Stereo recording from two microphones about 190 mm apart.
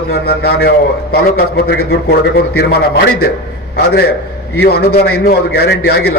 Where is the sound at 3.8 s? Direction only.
55° left (ahead or behind).